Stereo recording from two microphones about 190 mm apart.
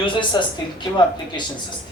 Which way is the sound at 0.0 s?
25° left (ahead or behind).